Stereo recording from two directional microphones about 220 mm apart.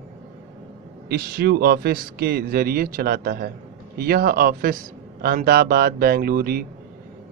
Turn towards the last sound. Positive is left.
turn(degrees=-40)  # may be behind; listen again after turning